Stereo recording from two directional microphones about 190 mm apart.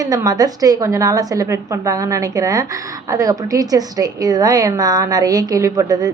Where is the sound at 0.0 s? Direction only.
20° right (ahead or behind).